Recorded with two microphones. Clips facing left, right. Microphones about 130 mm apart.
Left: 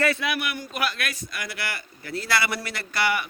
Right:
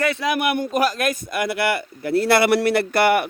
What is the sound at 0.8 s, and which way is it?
A man's voice, 40° right (ahead or behind).